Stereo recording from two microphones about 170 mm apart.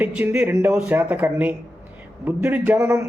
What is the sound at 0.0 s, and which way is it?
Speech, 10° right (ahead or behind).